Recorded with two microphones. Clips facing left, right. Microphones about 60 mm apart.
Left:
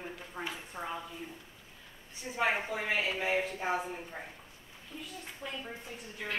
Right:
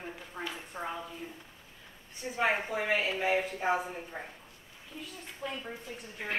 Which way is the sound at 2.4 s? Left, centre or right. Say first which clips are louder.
Right 2 dB; centre.